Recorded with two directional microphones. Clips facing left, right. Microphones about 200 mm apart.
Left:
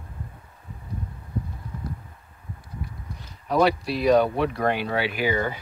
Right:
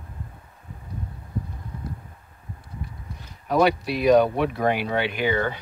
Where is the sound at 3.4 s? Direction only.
Centre (ahead or behind).